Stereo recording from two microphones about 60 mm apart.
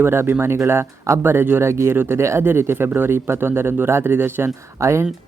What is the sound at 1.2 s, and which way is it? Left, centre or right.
Speech, right.